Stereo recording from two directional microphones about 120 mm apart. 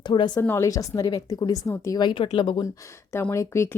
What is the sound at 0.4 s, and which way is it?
A woman's voice, 25° left (ahead or behind).